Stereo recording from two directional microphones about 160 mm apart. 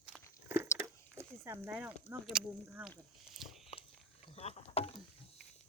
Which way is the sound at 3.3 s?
Centre (ahead or behind).